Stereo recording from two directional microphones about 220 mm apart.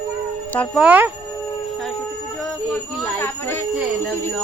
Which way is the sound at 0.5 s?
5° left (ahead or behind).